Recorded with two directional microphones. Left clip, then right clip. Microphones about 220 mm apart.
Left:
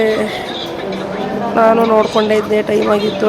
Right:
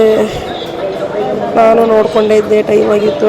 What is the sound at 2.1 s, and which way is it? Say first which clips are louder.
Speech: right 4 dB; centre (ahead or behind).